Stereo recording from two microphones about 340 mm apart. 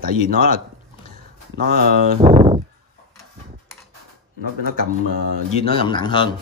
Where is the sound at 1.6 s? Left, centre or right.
Right.